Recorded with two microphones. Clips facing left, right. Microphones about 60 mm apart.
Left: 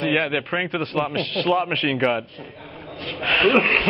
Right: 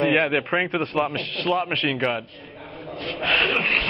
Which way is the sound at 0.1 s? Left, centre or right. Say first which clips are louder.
Right 1 dB; centre.